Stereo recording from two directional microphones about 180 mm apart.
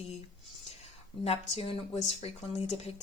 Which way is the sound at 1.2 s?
35° left (ahead or behind).